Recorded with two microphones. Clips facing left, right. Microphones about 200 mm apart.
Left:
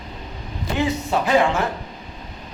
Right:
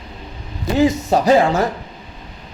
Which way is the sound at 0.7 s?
40° right (ahead or behind).